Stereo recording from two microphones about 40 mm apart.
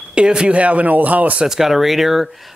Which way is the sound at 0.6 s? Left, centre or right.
Right.